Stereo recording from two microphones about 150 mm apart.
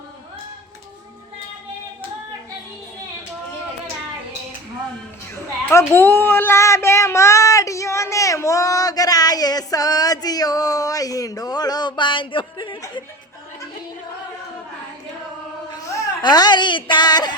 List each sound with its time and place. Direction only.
5.7 s child singing: 15° left (ahead or behind); by 12.8 s 35° left (ahead or behind)
15.7 s a woman's voice: 25° left (ahead or behind)